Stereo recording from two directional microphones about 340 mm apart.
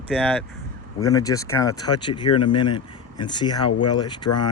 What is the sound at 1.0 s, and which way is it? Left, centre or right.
Speech, centre.